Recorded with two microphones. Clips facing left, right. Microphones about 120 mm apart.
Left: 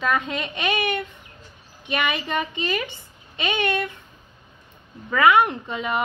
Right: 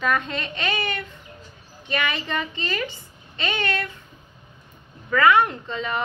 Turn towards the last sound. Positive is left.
turn(degrees=15)  # may be behind; listen again after turning